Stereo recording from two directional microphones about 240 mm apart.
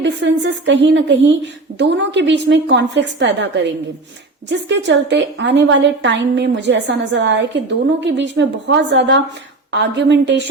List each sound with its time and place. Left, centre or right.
0.0 s a woman's voice: right